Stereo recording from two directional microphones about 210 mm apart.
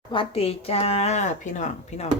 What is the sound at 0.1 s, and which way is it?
Speech, 25° left (ahead or behind).